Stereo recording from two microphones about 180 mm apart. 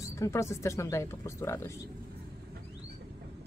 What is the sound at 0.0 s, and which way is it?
Speech, 15° left (ahead or behind).